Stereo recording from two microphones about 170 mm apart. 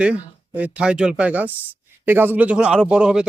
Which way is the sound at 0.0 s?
10° right (ahead or behind).